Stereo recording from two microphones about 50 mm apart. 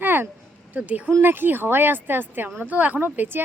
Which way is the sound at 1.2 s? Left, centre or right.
Right.